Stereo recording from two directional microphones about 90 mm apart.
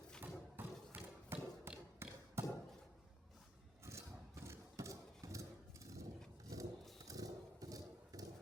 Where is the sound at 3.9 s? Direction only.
30° right (ahead or behind).